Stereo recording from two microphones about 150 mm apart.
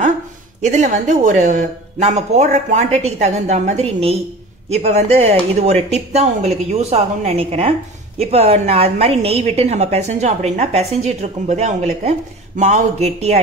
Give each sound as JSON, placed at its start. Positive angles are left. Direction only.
{"t": 0.6, "sound": "a woman's voice", "side_deg": -50}